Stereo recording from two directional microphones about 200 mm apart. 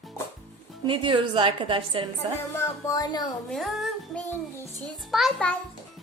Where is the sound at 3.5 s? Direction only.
Centre (ahead or behind).